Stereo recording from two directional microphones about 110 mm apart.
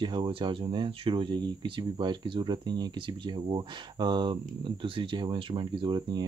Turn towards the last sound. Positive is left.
turn(degrees=-45)  # may be behind; listen again after turning